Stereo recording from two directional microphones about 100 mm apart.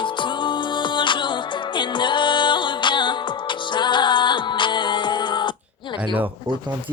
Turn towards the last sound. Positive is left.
turn(degrees=50)  # may be behind; listen again after turning